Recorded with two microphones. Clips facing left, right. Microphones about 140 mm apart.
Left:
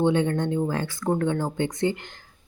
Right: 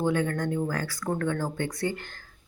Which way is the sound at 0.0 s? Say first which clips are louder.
Left 4 dB; 25° left (ahead or behind).